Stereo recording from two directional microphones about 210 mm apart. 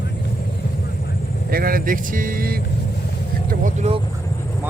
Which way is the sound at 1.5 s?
45° right (ahead or behind).